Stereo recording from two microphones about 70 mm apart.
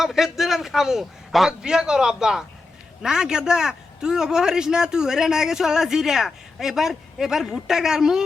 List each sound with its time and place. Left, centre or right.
0.0 s a man's voice: centre